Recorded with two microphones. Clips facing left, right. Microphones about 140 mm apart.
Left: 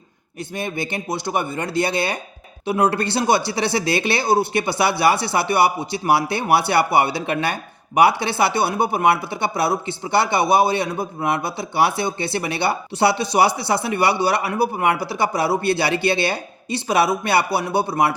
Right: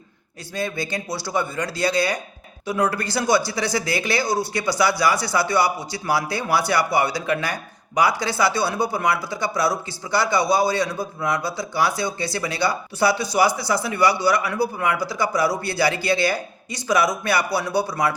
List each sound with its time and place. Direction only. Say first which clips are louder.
0.5 s speech: even; 20° left (ahead or behind)